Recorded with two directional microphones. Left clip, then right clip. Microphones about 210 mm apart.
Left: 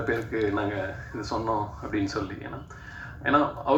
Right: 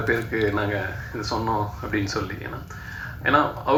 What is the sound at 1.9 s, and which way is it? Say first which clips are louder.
Speech: right 2 dB; 55° left (ahead or behind).